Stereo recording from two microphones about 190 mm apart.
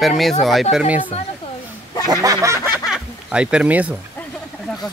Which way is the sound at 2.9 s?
5° right (ahead or behind).